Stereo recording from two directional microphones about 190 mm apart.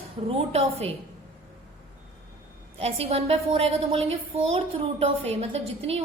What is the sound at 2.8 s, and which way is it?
A woman's voice, 35° right (ahead or behind).